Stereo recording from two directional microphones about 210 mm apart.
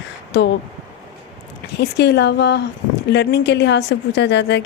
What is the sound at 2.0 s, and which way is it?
A woman's voice, 55° left (ahead or behind).